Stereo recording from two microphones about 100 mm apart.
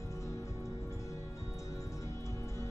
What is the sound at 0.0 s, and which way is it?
Music, 30° left (ahead or behind).